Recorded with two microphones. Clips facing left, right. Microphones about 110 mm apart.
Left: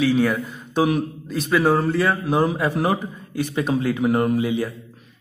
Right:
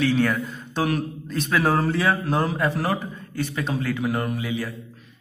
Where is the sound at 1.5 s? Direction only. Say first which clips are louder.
Left 3 dB; centre (ahead or behind).